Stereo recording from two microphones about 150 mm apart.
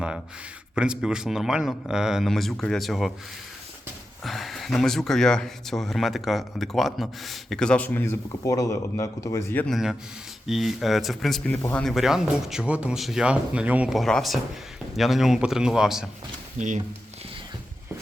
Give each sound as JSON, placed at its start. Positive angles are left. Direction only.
{"t": 0.8, "sound": "speech", "side_deg": -5}
{"t": 4.2, "sound": "speech", "side_deg": 0}
{"t": 9.6, "sound": "speech", "side_deg": 0}
{"t": 16.6, "sound": "speech", "side_deg": -55}